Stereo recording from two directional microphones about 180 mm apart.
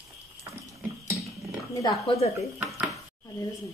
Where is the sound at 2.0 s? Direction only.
35° left (ahead or behind).